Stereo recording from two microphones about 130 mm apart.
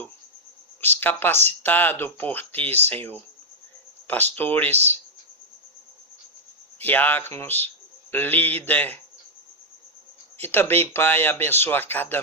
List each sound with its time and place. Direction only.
0.8 s speech: 15° left (ahead or behind)
6.7 s speech: 15° left (ahead or behind)
10.3 s speech: 15° left (ahead or behind)